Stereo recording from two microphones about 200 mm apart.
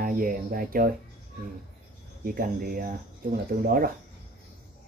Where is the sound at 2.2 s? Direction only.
45° right (ahead or behind).